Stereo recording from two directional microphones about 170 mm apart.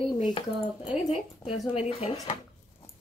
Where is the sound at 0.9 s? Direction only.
Centre (ahead or behind).